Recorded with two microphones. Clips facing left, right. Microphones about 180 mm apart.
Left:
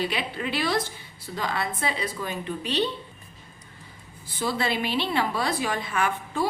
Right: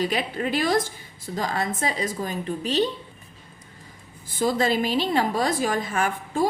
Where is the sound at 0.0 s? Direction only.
45° right (ahead or behind).